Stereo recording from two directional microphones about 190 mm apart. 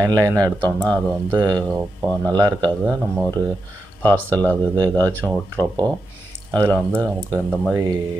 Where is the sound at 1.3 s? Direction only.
10° right (ahead or behind).